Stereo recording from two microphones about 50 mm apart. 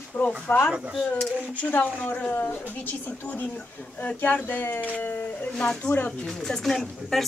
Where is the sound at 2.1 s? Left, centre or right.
Left.